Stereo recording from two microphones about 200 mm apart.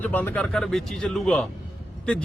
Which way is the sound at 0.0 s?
10° left (ahead or behind).